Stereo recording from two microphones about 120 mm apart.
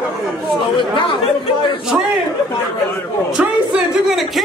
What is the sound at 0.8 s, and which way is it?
Chatter, 45° left (ahead or behind).